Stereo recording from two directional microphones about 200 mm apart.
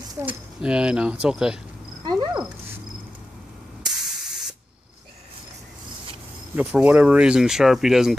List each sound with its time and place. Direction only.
0.1 s speech: 10° right (ahead or behind)
2.0 s cat: 20° right (ahead or behind)
3.8 s spray: 5° right (ahead or behind)
6.5 s speech: 5° right (ahead or behind)